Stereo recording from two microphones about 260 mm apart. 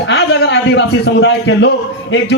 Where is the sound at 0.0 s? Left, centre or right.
Left.